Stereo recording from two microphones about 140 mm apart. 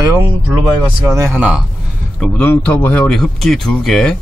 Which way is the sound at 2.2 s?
10° left (ahead or behind).